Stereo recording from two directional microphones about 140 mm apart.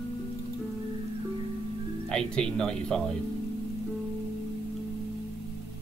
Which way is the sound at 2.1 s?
5° left (ahead or behind).